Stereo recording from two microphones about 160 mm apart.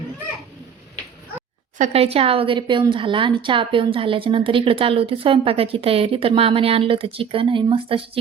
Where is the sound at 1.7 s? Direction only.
50° right (ahead or behind).